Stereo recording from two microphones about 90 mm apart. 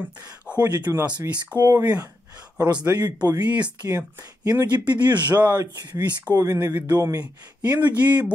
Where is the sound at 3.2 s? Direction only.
50° right (ahead or behind).